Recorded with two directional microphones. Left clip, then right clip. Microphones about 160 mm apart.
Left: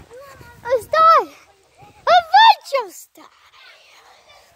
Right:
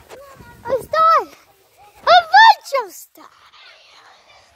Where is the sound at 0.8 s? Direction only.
35° left (ahead or behind).